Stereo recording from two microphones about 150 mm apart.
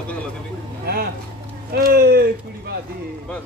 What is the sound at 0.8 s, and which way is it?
Speech, 90° right.